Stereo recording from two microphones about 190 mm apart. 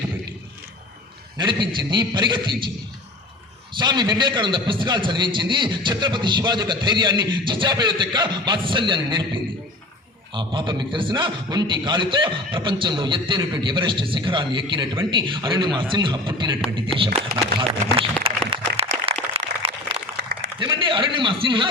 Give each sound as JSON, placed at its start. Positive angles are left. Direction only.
{"t": 1.4, "sound": "a man's voice", "side_deg": -25}
{"t": 17.3, "sound": "speech", "side_deg": -50}
{"t": 17.9, "sound": "a sound", "side_deg": -30}